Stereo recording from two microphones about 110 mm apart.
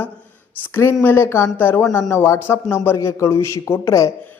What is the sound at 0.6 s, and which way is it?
Speech, 20° left (ahead or behind).